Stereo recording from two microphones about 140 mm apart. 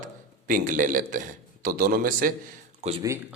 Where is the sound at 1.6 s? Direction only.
90° right.